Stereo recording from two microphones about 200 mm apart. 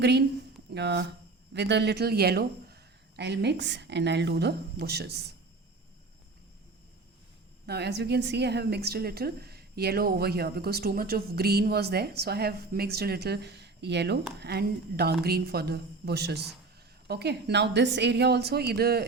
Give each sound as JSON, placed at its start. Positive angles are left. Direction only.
{"t": 0.0, "sound": "speech", "side_deg": -55}
{"t": 7.7, "sound": "a woman's voice", "side_deg": -55}